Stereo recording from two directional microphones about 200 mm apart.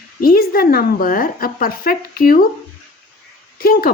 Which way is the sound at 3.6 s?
45° left (ahead or behind).